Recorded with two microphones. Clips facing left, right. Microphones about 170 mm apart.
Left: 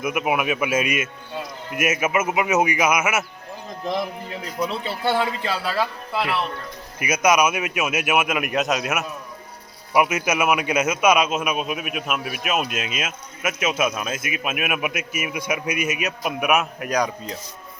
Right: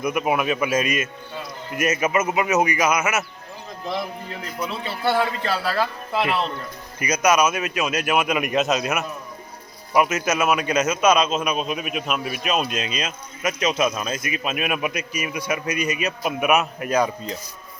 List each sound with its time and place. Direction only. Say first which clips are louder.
0.0 s a man's voice: right 1 dB; 5° left (ahead or behind)
5.0 s a man's voice: right 1 dB; centre (ahead or behind)
6.1 s speech: right 2 dB; 20° right (ahead or behind)
7.0 s a man's voice: even; 10° left (ahead or behind)
9.9 s a man's voice: even; 10° left (ahead or behind)